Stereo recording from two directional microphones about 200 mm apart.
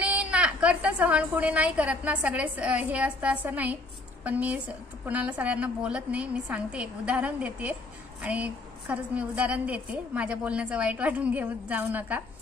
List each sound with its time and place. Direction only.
0.0 s a woman's voice: 5° right (ahead or behind)